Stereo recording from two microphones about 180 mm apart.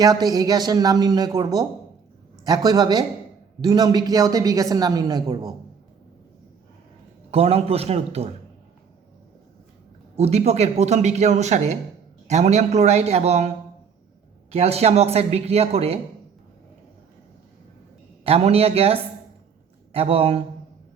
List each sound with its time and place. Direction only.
0.0 s speech: 20° right (ahead or behind)
7.3 s a man's voice: 35° right (ahead or behind)
10.2 s a man's voice: 35° right (ahead or behind)
14.5 s a man's voice: 35° right (ahead or behind)
18.2 s a man's voice: 35° right (ahead or behind)